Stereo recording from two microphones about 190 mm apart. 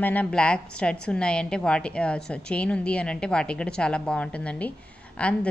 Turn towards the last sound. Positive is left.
turn(degrees=5)  # may be behind; listen again after turning